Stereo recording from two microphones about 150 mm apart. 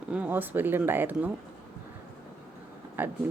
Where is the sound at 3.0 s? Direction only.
10° right (ahead or behind).